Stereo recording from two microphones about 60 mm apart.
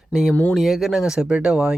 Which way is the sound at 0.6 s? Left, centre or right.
Centre.